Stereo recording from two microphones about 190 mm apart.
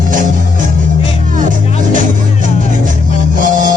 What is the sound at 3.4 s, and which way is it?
Music, 45° right (ahead or behind).